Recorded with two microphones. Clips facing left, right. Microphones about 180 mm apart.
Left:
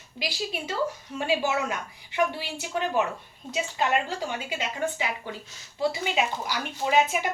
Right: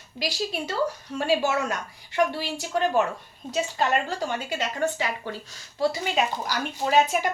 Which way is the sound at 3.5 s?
40° right (ahead or behind).